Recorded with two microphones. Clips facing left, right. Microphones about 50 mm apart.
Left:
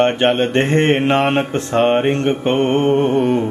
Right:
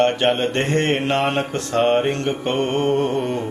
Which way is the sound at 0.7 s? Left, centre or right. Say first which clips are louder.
Left 5 dB; left.